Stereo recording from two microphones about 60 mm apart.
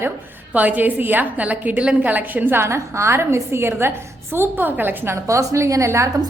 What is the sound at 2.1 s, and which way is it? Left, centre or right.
Speech, right.